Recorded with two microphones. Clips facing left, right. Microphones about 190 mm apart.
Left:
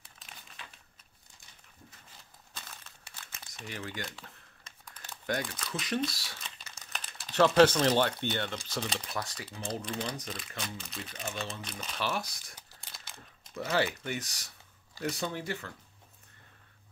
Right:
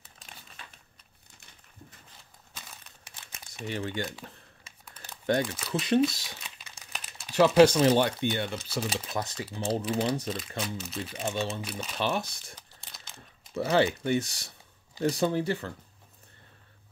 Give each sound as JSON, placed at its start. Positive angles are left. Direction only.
{"t": 3.2, "sound": "crumpling", "side_deg": -15}
{"t": 3.6, "sound": "speech", "side_deg": -30}
{"t": 4.6, "sound": "crumpling", "side_deg": -5}
{"t": 5.2, "sound": "speech", "side_deg": -25}
{"t": 6.4, "sound": "typing", "side_deg": -10}
{"t": 7.2, "sound": "speech", "side_deg": -10}
{"t": 9.1, "sound": "speech", "side_deg": -20}
{"t": 9.5, "sound": "speech", "side_deg": -5}
{"t": 11.1, "sound": "speech", "side_deg": -30}
{"t": 12.9, "sound": "a sound", "side_deg": 0}
{"t": 13.6, "sound": "speech", "side_deg": -30}